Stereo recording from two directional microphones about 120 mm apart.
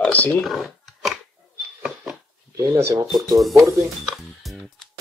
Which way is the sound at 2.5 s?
25° right (ahead or behind).